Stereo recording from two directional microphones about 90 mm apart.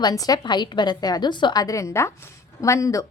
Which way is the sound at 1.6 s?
35° left (ahead or behind).